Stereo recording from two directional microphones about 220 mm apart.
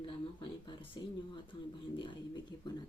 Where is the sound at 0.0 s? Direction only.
20° left (ahead or behind).